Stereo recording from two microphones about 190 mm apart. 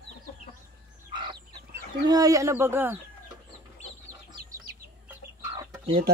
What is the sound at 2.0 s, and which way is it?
Speech, 20° right (ahead or behind).